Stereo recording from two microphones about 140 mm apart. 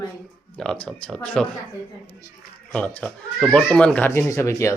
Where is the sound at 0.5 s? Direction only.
5° left (ahead or behind).